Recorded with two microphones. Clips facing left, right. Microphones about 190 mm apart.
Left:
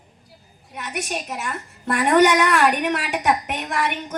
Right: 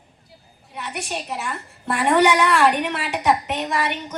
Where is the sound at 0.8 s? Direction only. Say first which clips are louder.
Left 1 dB; 45° left (ahead or behind).